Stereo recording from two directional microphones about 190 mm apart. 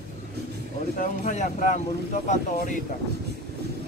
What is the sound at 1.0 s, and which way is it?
Speech, 40° left (ahead or behind).